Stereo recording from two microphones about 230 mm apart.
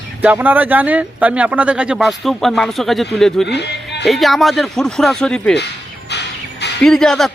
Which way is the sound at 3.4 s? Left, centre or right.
Left.